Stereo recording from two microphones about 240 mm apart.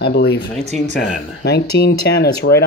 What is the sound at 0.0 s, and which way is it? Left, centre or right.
Speech, left.